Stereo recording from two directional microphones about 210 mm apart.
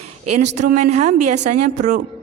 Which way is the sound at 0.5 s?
35° right (ahead or behind).